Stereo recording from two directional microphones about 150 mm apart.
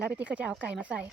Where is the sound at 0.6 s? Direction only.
10° right (ahead or behind).